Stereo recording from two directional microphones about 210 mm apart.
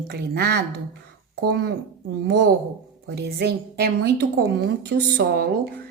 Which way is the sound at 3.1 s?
50° right (ahead or behind).